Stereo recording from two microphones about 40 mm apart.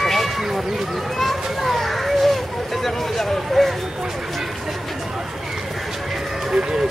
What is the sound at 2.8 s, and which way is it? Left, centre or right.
Speech, centre.